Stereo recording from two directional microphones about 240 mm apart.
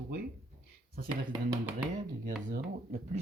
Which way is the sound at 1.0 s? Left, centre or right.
Centre.